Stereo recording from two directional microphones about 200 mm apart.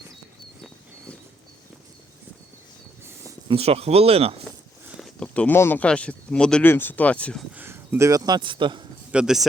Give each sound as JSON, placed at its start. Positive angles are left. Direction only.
{"t": 3.5, "sound": "speech", "side_deg": -30}
{"t": 4.9, "sound": "speech", "side_deg": 5}
{"t": 7.5, "sound": "speech", "side_deg": -10}
{"t": 9.1, "sound": "speech", "side_deg": 0}